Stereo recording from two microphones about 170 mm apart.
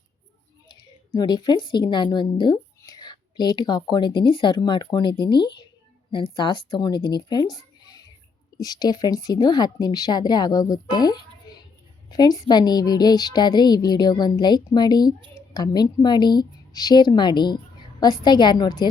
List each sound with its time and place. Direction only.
0.7 s a woman's voice: 25° left (ahead or behind)
11.5 s a sound: 25° left (ahead or behind)
12.1 s a woman's voice: 25° left (ahead or behind)